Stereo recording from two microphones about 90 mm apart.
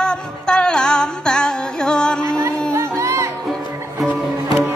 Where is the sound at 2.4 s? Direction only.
35° right (ahead or behind).